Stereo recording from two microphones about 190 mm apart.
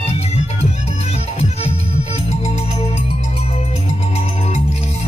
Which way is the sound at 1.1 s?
35° left (ahead or behind).